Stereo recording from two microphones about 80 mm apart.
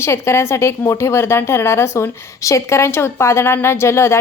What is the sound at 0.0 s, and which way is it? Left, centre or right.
A woman's voice, left.